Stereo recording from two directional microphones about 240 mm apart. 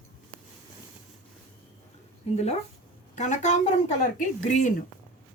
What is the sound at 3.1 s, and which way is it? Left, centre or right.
A woman's voice, left.